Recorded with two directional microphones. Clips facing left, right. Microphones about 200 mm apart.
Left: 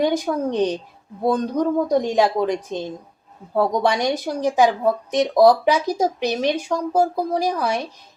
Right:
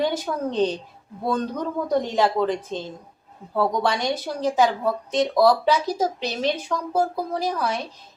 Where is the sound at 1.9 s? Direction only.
15° left (ahead or behind).